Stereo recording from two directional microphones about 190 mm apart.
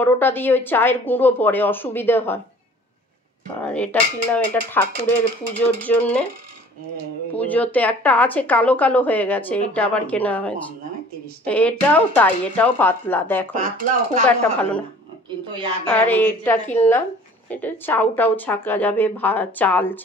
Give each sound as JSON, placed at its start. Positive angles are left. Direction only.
{"t": 0.0, "sound": "speech", "side_deg": 10}
{"t": 3.4, "sound": "speech", "side_deg": 5}
{"t": 7.3, "sound": "speech", "side_deg": 10}
{"t": 13.5, "sound": "speech", "side_deg": -45}
{"t": 15.2, "sound": "speech", "side_deg": -25}
{"t": 15.9, "sound": "speech", "side_deg": 10}